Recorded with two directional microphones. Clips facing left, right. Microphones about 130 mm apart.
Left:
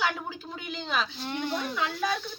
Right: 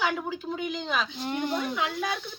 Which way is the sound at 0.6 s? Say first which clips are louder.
Left 1 dB; 10° right (ahead or behind).